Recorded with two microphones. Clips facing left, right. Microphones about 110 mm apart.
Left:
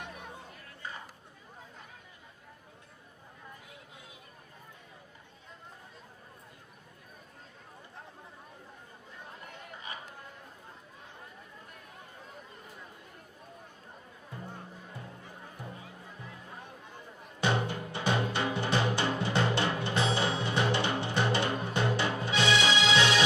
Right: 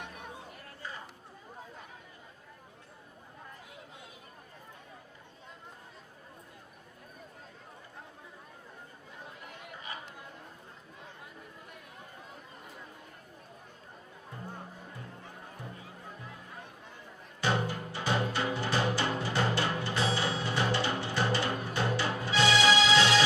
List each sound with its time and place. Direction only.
17.4 s music: 20° left (ahead or behind)